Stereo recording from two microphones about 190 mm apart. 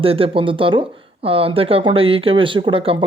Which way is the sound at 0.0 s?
30° right (ahead or behind).